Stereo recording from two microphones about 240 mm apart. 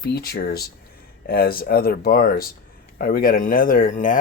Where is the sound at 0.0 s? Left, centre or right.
Left.